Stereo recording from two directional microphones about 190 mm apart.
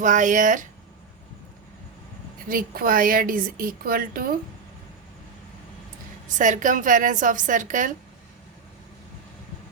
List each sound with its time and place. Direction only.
0.0 s a woman's voice: 40° right (ahead or behind)
2.5 s a woman's voice: 50° right (ahead or behind)
6.2 s a woman's voice: 40° right (ahead or behind)